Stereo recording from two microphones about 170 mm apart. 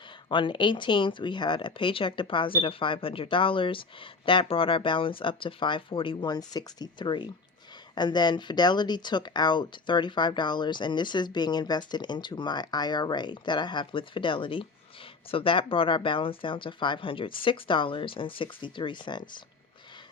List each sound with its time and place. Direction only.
0.3 s speech: 30° left (ahead or behind)